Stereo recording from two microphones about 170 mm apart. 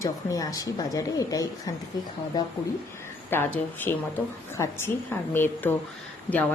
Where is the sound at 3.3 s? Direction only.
10° left (ahead or behind).